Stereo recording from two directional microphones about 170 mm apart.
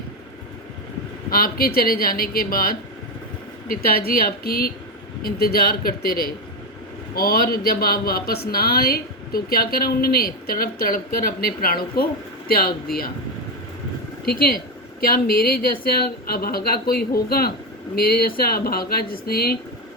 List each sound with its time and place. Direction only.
1.3 s speech: 60° left (ahead or behind)
14.3 s speech: 60° left (ahead or behind)